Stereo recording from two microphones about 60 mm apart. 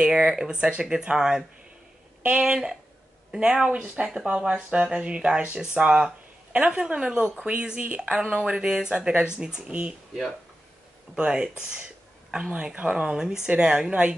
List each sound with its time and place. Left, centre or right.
0.1 s speech: centre
2.4 s speech: centre
11.1 s speech: centre